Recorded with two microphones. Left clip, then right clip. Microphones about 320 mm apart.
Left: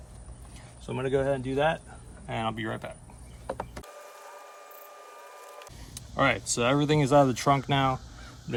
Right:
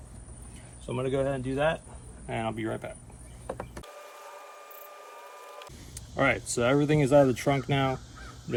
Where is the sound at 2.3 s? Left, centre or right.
Left.